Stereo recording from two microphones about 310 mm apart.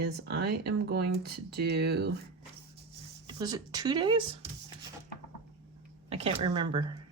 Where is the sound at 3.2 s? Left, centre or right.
Centre.